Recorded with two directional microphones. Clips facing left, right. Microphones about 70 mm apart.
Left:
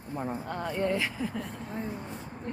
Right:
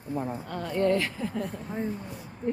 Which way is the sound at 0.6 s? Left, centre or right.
Centre.